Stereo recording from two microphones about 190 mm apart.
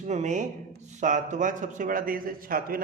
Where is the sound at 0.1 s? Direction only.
40° right (ahead or behind).